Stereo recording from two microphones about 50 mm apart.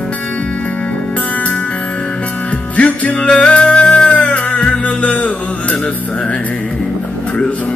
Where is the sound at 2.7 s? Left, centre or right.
Left.